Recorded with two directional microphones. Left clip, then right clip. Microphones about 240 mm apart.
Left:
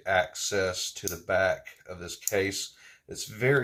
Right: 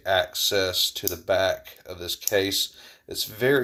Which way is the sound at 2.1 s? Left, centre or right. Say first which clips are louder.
Right 5 dB; right.